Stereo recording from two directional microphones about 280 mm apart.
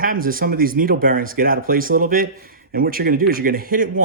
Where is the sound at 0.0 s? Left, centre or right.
Right.